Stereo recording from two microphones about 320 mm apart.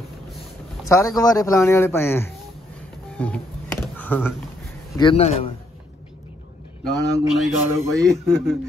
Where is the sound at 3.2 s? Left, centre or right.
Centre.